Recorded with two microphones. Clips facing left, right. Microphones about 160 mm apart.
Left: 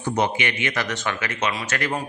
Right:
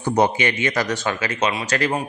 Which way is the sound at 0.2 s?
40° right (ahead or behind).